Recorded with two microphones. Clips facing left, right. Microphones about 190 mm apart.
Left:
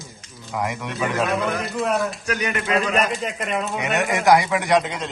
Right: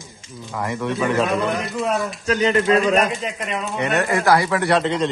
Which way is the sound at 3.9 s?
15° left (ahead or behind).